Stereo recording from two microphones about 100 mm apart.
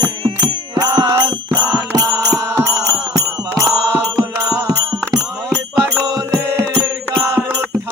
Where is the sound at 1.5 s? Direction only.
40° right (ahead or behind).